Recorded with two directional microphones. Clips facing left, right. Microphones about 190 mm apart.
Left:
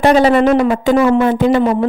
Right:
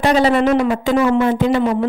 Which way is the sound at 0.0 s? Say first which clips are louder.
Left 4 dB; 50° left (ahead or behind).